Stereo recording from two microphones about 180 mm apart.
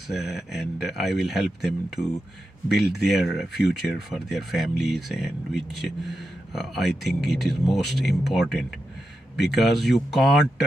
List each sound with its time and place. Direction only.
0.1 s speech: centre (ahead or behind)